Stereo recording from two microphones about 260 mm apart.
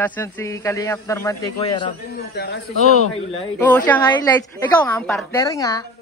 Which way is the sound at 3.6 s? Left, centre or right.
Centre.